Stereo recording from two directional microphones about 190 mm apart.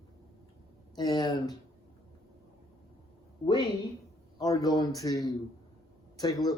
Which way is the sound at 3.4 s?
25° left (ahead or behind).